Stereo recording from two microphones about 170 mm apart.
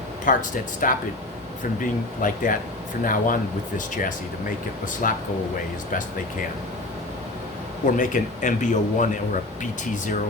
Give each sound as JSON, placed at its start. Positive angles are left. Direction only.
{"t": 0.3, "sound": "a man's voice", "side_deg": 50}
{"t": 7.9, "sound": "a man's voice", "side_deg": 50}